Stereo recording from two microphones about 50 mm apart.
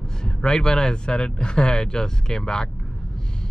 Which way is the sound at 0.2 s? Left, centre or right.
Centre.